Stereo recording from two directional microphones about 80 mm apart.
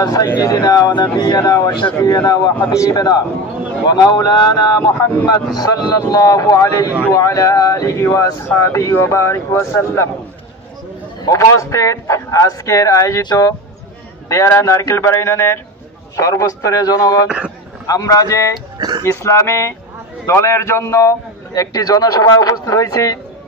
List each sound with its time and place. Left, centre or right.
0.0 s a man's voice: left
1.4 s a man's voice: left
2.7 s speech: left
3.0 s a man's voice: left
11.2 s speech: left
14.3 s a man's voice: left
18.8 s a sound: right
19.0 s a man's voice: left